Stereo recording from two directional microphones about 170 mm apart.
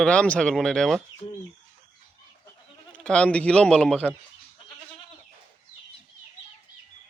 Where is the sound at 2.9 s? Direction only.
5° left (ahead or behind).